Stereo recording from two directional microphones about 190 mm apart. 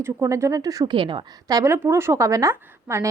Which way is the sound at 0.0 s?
15° right (ahead or behind).